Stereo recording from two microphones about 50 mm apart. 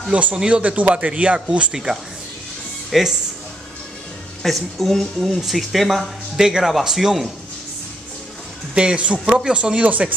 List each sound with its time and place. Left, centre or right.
0.1 s speech: right
1.7 s speech: centre
4.4 s speech: centre
8.7 s speech: right
9.8 s speech: right